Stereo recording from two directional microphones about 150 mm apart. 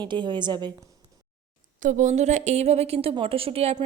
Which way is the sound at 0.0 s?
30° right (ahead or behind).